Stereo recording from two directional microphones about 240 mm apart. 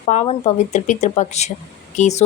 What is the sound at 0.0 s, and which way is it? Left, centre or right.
Speech, left.